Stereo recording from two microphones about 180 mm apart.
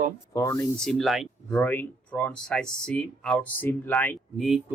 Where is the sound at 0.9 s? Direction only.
Centre (ahead or behind).